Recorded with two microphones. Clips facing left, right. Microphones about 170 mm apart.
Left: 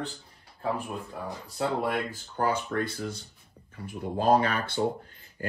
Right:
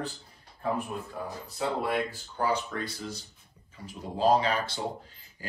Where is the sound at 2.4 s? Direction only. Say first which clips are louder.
Left 2 dB; 55° left (ahead or behind).